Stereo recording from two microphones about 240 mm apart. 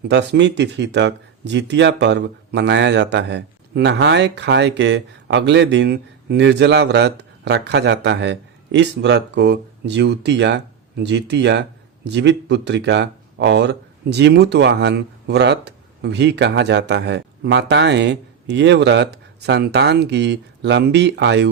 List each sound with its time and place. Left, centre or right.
0.1 s speech: right